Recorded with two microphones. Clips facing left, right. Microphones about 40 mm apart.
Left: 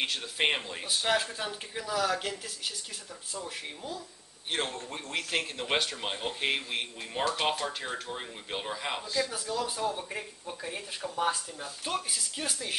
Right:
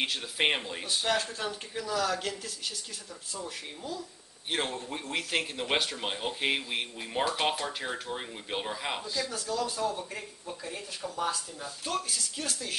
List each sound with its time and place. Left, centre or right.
0.0 s speech: centre
1.0 s speech: centre
4.5 s speech: centre; by 12.7 s left